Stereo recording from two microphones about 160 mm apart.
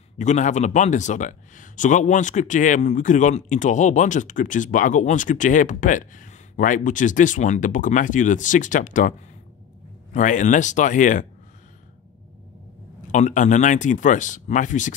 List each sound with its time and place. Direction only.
0.2 s speech: 50° left (ahead or behind)
10.1 s speech: 50° left (ahead or behind)
13.1 s speech: 50° left (ahead or behind)